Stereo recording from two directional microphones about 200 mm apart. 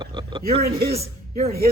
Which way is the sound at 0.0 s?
25° right (ahead or behind).